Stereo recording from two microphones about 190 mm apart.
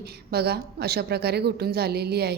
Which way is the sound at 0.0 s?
55° right (ahead or behind).